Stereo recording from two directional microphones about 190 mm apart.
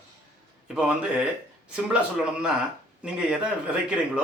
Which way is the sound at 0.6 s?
5° right (ahead or behind).